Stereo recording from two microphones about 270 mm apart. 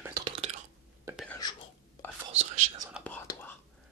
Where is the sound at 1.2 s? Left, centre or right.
Centre.